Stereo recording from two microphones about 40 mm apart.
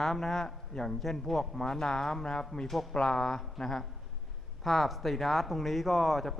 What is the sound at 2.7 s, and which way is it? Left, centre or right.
Speech, centre.